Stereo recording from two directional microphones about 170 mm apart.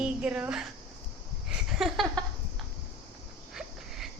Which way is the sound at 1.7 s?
Centre (ahead or behind).